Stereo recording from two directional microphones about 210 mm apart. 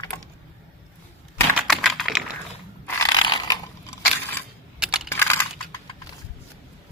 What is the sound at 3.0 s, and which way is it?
Mechanisms, 20° left (ahead or behind).